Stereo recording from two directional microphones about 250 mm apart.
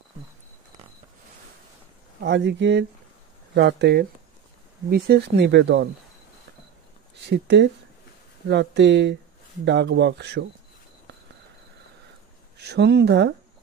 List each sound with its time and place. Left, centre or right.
2.1 s speech: right
7.2 s speech: right
12.5 s speech: right